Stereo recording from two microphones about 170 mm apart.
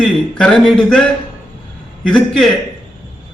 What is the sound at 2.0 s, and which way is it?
Speech, 5° left (ahead or behind).